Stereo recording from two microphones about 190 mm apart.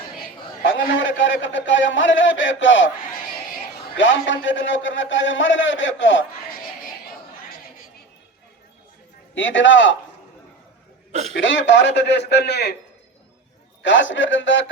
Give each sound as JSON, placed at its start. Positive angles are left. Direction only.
{"t": 0.6, "sound": "a man's voice", "side_deg": 75}
{"t": 3.9, "sound": "a man's voice", "side_deg": 80}
{"t": 9.3, "sound": "a man's voice", "side_deg": 80}
{"t": 11.1, "sound": "speech", "side_deg": -35}
{"t": 11.3, "sound": "a man's voice", "side_deg": 70}
{"t": 13.8, "sound": "a man's voice", "side_deg": 75}